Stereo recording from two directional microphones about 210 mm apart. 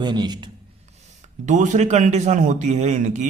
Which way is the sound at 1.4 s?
35° right (ahead or behind).